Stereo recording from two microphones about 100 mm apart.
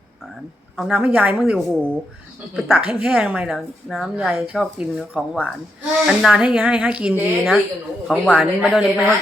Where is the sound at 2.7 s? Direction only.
15° right (ahead or behind).